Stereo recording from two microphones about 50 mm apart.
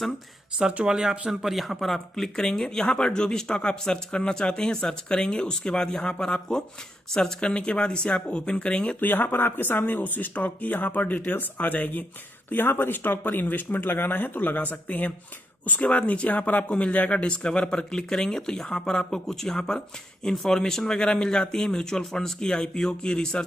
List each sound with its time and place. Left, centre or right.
0.5 s speech: centre
1.4 s speech: centre; by 8.9 s left
9.0 s speech: left; by 23.4 s centre